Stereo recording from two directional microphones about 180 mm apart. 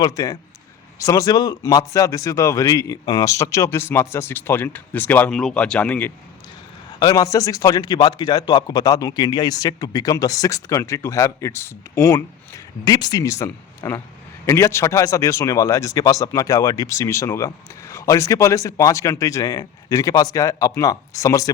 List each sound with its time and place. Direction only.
0.0 s a man's voice: 20° left (ahead or behind)
7.0 s a man's voice: 20° left (ahead or behind)